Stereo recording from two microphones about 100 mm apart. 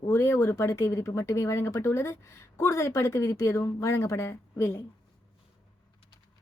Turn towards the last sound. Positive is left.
turn(degrees=25)  # may be behind; listen again after turning